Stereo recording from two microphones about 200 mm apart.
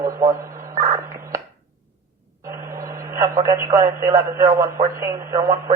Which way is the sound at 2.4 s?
15° right (ahead or behind).